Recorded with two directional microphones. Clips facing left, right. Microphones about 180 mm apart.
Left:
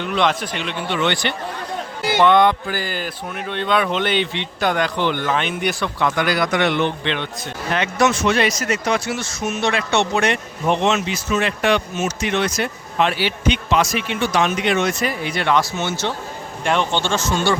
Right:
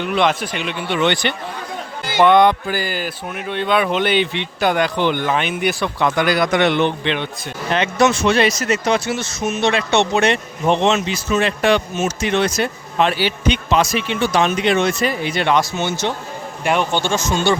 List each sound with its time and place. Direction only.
0.0 s speech: 10° right (ahead or behind)
6.0 s speech: 20° right (ahead or behind)
7.7 s speech: 25° right (ahead or behind)